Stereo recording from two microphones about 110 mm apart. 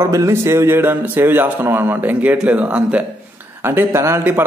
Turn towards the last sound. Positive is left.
turn(degrees=-20)  # may be behind; listen again after turning